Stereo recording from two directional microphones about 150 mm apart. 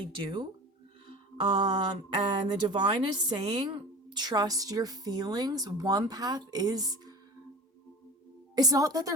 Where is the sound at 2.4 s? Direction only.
30° right (ahead or behind).